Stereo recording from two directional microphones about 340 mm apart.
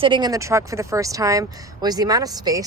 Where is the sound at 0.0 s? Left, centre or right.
Centre.